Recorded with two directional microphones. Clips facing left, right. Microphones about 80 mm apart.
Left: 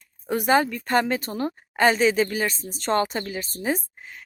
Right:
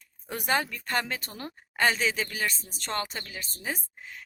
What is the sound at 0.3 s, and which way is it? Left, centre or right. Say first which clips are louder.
A woman's voice: left 8 dB; centre.